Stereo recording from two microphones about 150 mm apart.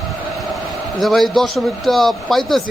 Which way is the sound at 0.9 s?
Centre (ahead or behind).